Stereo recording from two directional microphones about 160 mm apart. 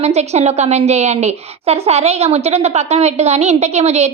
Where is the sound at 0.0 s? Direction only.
45° right (ahead or behind).